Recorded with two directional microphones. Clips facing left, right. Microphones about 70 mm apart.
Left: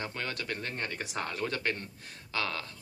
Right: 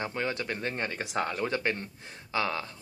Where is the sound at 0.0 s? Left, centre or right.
Centre.